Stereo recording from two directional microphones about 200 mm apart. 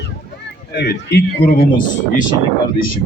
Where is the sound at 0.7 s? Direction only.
55° left (ahead or behind).